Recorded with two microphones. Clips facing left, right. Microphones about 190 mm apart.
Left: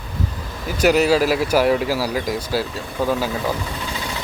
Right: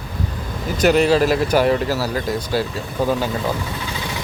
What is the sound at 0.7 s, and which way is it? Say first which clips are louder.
Speech: right 1 dB; 5° left (ahead or behind).